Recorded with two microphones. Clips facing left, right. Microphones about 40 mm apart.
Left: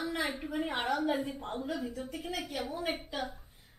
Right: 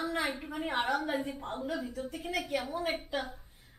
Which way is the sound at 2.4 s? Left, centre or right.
Right.